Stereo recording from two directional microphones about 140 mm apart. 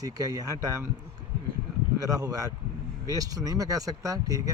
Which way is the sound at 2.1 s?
25° right (ahead or behind).